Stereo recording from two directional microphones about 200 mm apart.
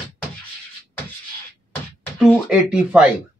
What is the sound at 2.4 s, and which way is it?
Speech, 5° right (ahead or behind).